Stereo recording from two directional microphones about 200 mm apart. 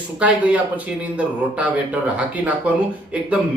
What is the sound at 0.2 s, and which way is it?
A man's voice, 5° right (ahead or behind).